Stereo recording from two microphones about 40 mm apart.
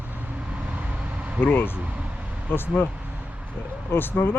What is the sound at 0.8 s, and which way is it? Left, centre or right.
Vehicle, right.